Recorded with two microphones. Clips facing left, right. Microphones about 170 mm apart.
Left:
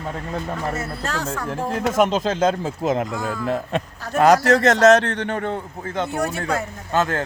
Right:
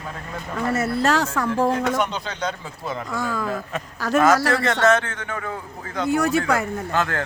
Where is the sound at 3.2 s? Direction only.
90° right.